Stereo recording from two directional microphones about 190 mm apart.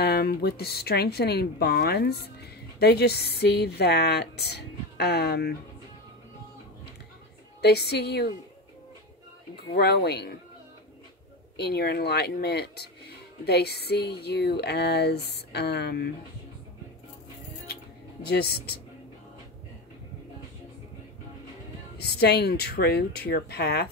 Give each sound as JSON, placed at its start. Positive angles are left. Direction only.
{"t": 0.0, "sound": "speech", "side_deg": 55}
{"t": 7.6, "sound": "speech", "side_deg": 60}
{"t": 9.8, "sound": "speech", "side_deg": 60}
{"t": 11.5, "sound": "speech", "side_deg": 55}
{"t": 18.2, "sound": "speech", "side_deg": 55}
{"t": 21.9, "sound": "speech", "side_deg": 55}